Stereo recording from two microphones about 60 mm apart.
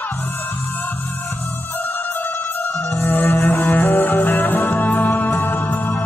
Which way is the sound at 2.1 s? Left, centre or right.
Left.